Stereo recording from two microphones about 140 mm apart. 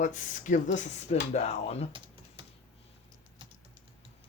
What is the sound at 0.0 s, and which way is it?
Speech, 65° left (ahead or behind).